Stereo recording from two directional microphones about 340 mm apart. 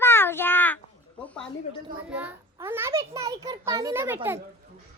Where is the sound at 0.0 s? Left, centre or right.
Centre.